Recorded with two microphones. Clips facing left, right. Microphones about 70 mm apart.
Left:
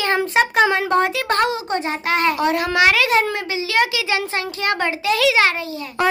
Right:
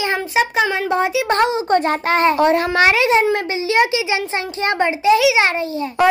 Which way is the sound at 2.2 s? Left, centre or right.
Right.